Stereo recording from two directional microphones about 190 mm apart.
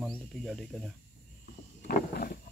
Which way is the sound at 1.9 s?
50° left (ahead or behind).